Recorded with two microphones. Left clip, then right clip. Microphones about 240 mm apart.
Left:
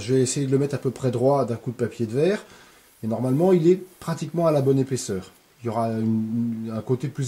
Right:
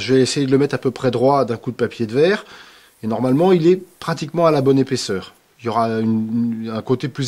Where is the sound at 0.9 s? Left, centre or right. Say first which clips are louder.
Right 7 dB; centre.